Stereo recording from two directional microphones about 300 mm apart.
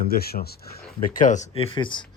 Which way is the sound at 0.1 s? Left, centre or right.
Left.